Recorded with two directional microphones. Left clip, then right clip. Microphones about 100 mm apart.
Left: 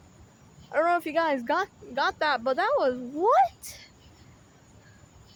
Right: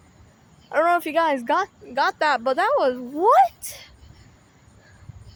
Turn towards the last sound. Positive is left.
turn(degrees=-50)  # may be behind; listen again after turning